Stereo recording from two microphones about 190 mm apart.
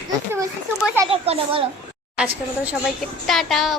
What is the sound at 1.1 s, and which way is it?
Speech, 30° right (ahead or behind).